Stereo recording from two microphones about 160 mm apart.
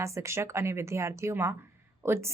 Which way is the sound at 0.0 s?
20° right (ahead or behind).